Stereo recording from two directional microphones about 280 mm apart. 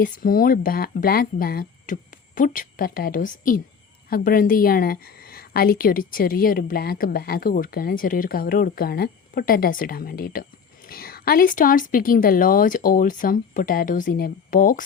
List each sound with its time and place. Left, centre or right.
0.0 s a woman's voice: left